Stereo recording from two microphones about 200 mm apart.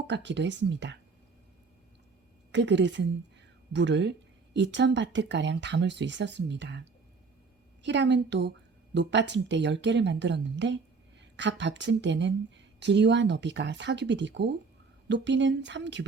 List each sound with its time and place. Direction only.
0.1 s speech: 60° right (ahead or behind)
2.5 s speech: 65° right (ahead or behind)
7.9 s speech: 60° right (ahead or behind)